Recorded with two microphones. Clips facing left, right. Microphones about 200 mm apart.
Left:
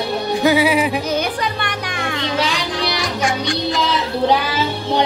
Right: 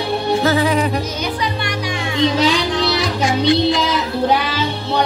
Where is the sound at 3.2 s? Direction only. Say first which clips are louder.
Right 6 dB; 50° left (ahead or behind).